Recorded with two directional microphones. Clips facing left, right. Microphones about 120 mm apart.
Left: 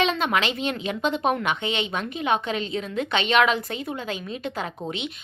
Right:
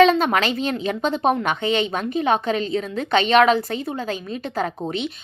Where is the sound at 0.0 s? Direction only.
40° right (ahead or behind).